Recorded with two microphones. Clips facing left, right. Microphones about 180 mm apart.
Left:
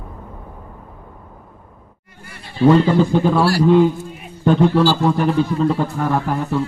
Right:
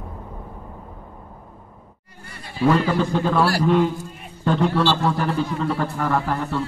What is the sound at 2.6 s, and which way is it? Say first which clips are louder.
Speech: left 6 dB; 25° left (ahead or behind).